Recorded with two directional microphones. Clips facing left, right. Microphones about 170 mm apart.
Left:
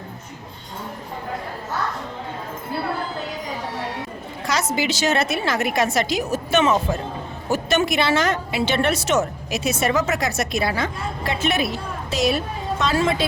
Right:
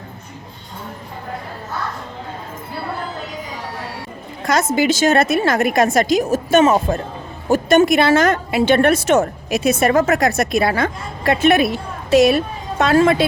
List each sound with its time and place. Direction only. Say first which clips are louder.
4.4 s a woman's voice: right 7 dB; 50° right (ahead or behind)